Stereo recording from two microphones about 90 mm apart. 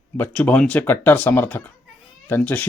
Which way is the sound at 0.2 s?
20° left (ahead or behind).